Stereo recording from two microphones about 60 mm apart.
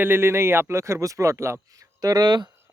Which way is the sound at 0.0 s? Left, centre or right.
Right.